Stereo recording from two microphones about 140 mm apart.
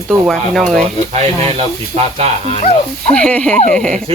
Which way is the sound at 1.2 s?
50° right (ahead or behind).